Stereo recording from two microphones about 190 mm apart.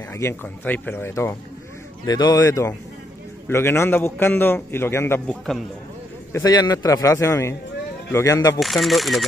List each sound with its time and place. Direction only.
0.1 s a man's voice: 15° left (ahead or behind)
8.5 s speech: centre (ahead or behind)